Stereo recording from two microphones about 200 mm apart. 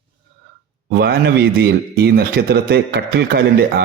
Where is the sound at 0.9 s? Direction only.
55° right (ahead or behind).